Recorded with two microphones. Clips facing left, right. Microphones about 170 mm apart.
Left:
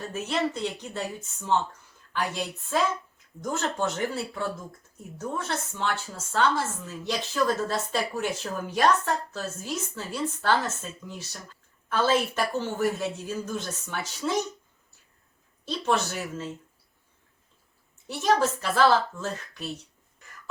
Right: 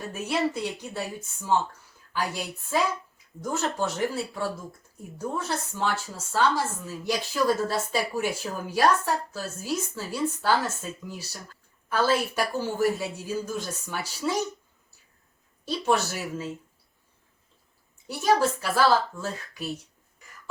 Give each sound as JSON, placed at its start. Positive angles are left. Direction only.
{"t": 0.0, "sound": "speech", "side_deg": -10}
{"t": 15.6, "sound": "speech", "side_deg": -5}
{"t": 18.1, "sound": "speech", "side_deg": -5}